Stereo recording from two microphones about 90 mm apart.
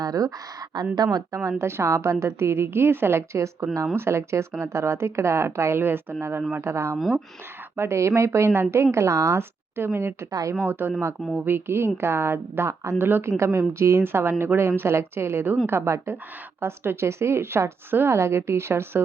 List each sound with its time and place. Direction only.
0.0 s speech: 45° right (ahead or behind)
1.5 s a woman's voice: 30° right (ahead or behind)
10.7 s a woman's voice: 25° right (ahead or behind)
11.2 s speech: 5° right (ahead or behind)
11.4 s a woman's voice: 25° right (ahead or behind)